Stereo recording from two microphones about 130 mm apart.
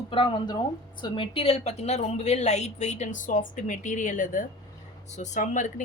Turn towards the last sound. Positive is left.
turn(degrees=75)  # may be behind; listen again after turning